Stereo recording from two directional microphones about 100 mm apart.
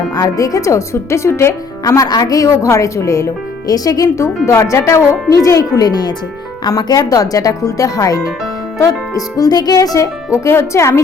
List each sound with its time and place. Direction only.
0.2 s a woman's voice: 35° left (ahead or behind)
1.9 s a woman's voice: 35° left (ahead or behind)